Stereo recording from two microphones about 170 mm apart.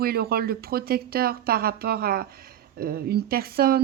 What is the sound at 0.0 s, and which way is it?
A woman's voice, 65° right (ahead or behind).